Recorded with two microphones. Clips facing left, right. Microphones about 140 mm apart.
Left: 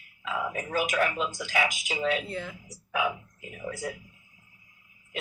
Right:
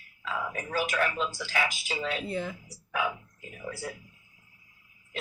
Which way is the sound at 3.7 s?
Centre (ahead or behind).